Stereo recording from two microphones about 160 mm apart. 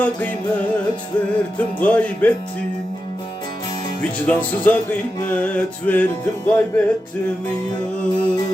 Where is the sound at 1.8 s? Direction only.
10° left (ahead or behind).